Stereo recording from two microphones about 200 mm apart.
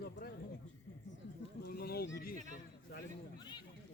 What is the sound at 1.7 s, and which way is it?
Speech, 50° left (ahead or behind).